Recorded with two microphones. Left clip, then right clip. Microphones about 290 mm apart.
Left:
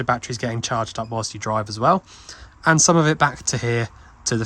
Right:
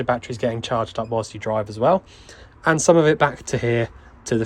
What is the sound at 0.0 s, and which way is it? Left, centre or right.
Speech, centre.